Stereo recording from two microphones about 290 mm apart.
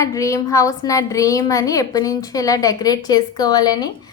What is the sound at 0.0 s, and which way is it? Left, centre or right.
A woman's voice, centre.